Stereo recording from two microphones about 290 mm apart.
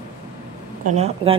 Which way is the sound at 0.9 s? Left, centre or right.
Right.